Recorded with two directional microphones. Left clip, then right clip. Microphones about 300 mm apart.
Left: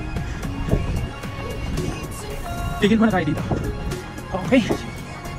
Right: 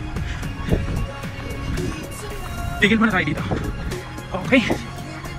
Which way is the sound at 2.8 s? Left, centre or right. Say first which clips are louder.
Right 2 dB; centre.